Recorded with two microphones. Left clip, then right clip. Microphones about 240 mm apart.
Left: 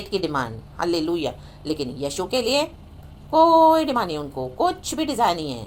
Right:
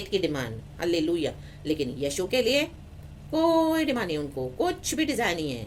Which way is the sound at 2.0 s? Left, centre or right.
Centre.